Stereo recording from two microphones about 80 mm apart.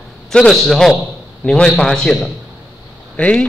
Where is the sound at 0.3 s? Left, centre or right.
Centre.